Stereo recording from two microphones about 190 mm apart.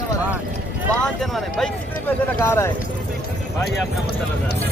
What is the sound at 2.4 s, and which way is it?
Speech, 10° left (ahead or behind).